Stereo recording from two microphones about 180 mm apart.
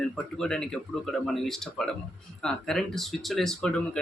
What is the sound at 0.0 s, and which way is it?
Speech, centre (ahead or behind).